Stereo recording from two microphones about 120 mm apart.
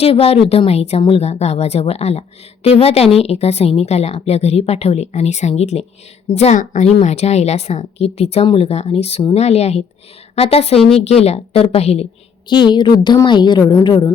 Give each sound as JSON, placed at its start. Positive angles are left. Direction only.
{"t": 0.0, "sound": "a woman's voice", "side_deg": 55}
{"t": 6.3, "sound": "a woman's voice", "side_deg": 75}
{"t": 6.9, "sound": "a woman's voice", "side_deg": 65}
{"t": 12.5, "sound": "a woman's voice", "side_deg": 40}